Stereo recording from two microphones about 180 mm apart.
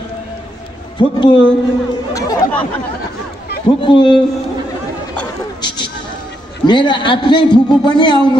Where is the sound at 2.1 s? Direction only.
20° left (ahead or behind).